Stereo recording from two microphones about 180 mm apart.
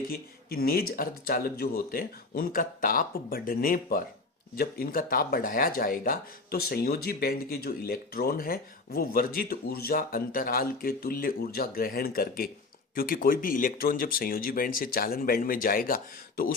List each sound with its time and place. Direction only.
0.1 s speech: 55° left (ahead or behind)